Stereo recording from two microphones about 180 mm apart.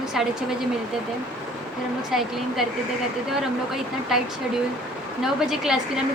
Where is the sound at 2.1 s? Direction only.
Centre (ahead or behind).